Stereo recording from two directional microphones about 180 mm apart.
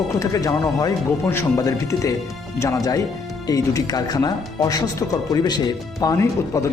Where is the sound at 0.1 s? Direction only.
20° left (ahead or behind).